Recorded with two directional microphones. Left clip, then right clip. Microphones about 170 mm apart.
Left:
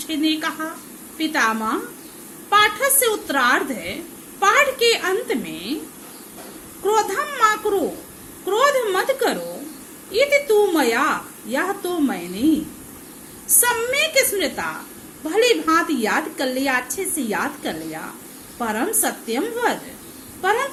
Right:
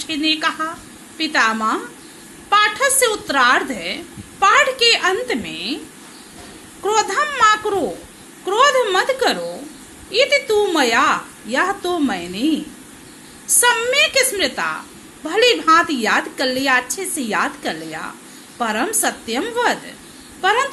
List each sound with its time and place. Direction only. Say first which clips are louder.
0.0 s a woman's voice: right 3 dB; 15° right (ahead or behind)
6.8 s a woman's voice: right 2 dB; 15° right (ahead or behind)
13.6 s a woman's voice: right 5 dB; 10° right (ahead or behind)